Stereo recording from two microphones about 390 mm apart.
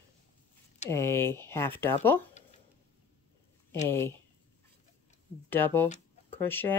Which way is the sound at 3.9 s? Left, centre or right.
Centre.